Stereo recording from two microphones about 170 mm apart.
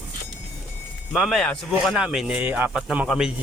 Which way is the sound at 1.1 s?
Centre (ahead or behind).